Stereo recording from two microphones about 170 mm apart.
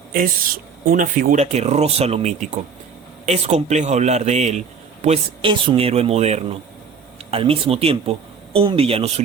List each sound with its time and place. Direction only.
0.9 s speech: 55° right (ahead or behind)
1.5 s speech: 40° right (ahead or behind)